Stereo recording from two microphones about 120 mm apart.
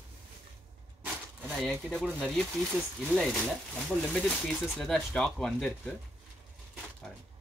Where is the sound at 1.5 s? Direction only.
5° left (ahead or behind).